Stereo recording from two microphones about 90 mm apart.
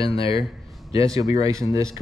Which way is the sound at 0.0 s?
85° left.